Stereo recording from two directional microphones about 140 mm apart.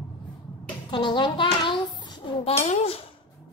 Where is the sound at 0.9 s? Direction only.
35° left (ahead or behind).